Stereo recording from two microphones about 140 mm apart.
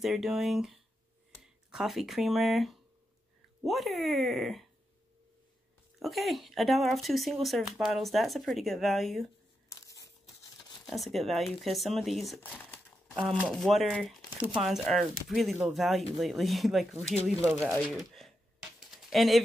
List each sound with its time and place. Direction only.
0.0 s speech: centre (ahead or behind)
5.9 s speech: centre (ahead or behind)
9.7 s tearing: 25° left (ahead or behind)
10.9 s speech: centre (ahead or behind)
12.4 s speech: 15° left (ahead or behind)
13.1 s speech: centre (ahead or behind)
18.8 s a sound: centre (ahead or behind)